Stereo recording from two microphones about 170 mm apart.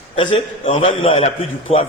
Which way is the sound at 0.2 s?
30° left (ahead or behind).